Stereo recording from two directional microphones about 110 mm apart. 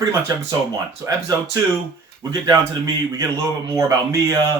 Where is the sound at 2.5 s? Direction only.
30° right (ahead or behind).